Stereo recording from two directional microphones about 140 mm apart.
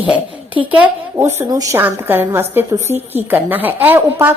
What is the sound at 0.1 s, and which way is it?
Speech, 10° right (ahead or behind).